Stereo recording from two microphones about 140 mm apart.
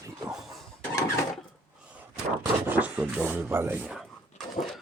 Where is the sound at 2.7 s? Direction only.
10° right (ahead or behind).